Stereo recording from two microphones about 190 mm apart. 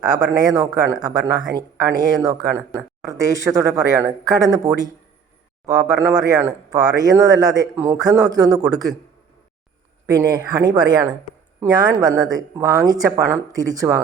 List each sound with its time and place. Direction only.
0.0 s speech: 20° right (ahead or behind)
10.1 s speech: 20° right (ahead or behind)